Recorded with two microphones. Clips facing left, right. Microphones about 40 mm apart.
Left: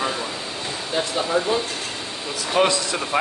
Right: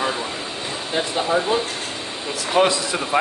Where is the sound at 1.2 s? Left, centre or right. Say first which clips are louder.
Right 2 dB; centre.